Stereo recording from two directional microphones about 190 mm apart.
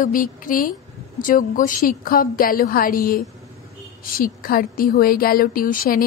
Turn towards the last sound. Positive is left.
turn(degrees=45)  # may be behind; listen again after turning